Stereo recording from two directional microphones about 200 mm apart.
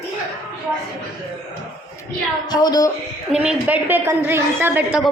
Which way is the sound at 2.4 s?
20° left (ahead or behind).